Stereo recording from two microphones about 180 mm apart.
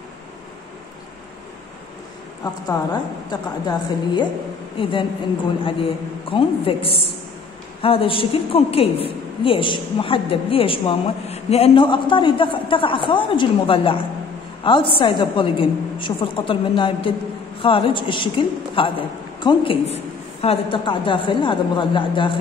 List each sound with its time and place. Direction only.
2.4 s a woman's voice: 25° left (ahead or behind)